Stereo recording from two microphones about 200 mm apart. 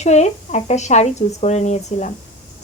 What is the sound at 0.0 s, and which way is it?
A woman's voice, 35° left (ahead or behind).